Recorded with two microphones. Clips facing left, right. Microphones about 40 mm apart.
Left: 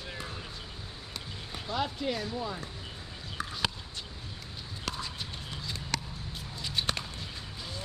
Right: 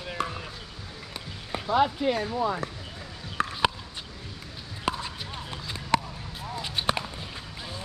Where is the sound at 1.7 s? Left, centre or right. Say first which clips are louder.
Right 9 dB; right.